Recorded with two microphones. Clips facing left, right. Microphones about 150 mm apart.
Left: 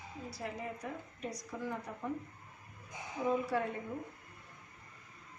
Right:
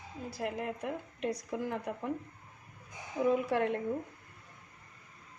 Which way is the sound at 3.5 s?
75° right (ahead or behind).